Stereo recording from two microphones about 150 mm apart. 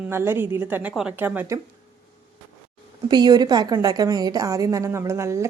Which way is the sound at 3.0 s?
30° right (ahead or behind).